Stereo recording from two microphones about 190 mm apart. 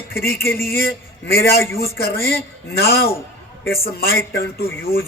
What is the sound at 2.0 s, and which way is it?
Speech, 55° left (ahead or behind).